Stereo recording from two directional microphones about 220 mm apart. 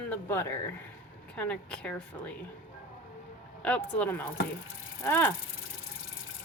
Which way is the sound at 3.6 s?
5° left (ahead or behind).